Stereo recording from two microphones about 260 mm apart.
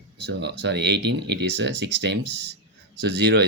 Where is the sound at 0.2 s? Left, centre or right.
Right.